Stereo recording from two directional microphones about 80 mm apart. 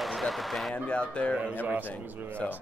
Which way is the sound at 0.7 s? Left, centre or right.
Centre.